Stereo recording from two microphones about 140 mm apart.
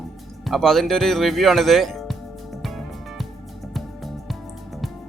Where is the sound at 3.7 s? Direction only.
Centre (ahead or behind).